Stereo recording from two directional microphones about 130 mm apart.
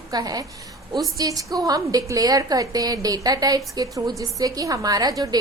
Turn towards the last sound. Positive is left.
turn(degrees=-30)  # may be behind; listen again after turning